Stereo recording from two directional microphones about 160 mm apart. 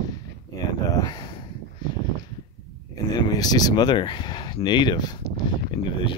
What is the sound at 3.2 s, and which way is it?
Speech, 25° left (ahead or behind).